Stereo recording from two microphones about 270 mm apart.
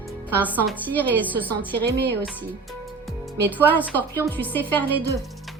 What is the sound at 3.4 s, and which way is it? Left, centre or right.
Speech, centre.